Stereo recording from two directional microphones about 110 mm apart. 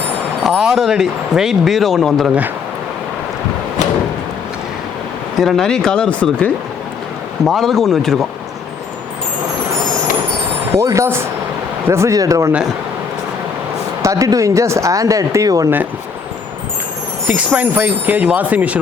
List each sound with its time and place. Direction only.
0.4 s speech: 5° right (ahead or behind)
5.4 s speech: centre (ahead or behind)
7.4 s speech: centre (ahead or behind)
10.8 s speech: 30° right (ahead or behind)
14.0 s speech: 30° right (ahead or behind)
17.2 s speech: 15° right (ahead or behind)